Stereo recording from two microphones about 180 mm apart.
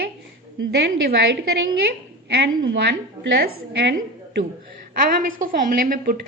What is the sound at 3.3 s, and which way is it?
Speech, 60° right (ahead or behind).